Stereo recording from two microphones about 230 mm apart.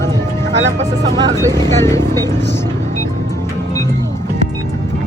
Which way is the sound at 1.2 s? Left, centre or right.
Centre.